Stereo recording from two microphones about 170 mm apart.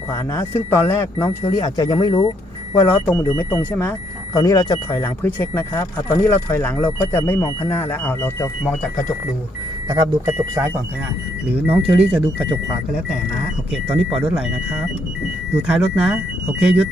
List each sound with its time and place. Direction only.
0.1 s speech: 15° left (ahead or behind)
1.3 s speech: 40° left (ahead or behind)
1.5 s speech: 25° left (ahead or behind)
2.9 s speech: 10° left (ahead or behind)
4.4 s speech: 20° left (ahead or behind)
9.9 s speech: 20° right (ahead or behind)
14.3 s speech: 5° right (ahead or behind)